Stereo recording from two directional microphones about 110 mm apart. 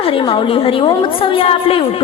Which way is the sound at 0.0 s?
55° left (ahead or behind).